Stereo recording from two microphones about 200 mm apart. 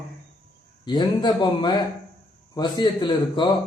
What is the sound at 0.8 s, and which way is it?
A man's voice, 20° left (ahead or behind).